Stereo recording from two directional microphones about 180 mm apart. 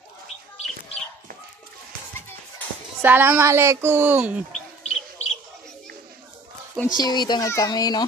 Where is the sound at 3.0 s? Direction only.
10° right (ahead or behind).